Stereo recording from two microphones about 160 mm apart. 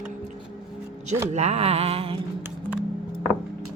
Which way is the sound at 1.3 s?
40° right (ahead or behind).